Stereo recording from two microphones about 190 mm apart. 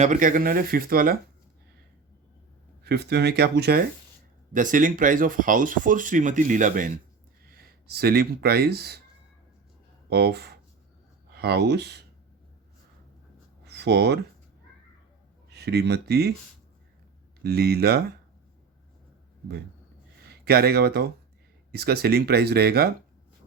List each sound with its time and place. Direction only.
0.0 s speech: 45° right (ahead or behind)
2.8 s speech: 60° right (ahead or behind)
4.5 s speech: 45° right (ahead or behind)
10.1 s speech: 60° right (ahead or behind)
13.7 s a sound: 60° right (ahead or behind)
15.4 s speech: 60° right (ahead or behind)
17.4 s speech: 55° right (ahead or behind)
20.2 s speech: 55° right (ahead or behind)